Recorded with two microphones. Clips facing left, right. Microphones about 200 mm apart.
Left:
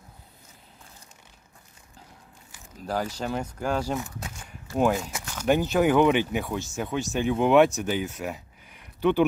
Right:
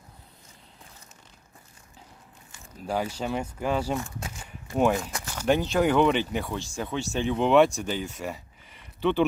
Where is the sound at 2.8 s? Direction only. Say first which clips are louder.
Even; 10° right (ahead or behind).